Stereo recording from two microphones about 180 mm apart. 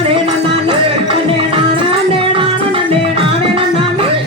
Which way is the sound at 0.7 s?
30° right (ahead or behind).